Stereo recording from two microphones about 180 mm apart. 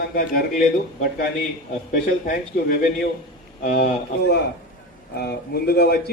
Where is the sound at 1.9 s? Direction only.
50° left (ahead or behind).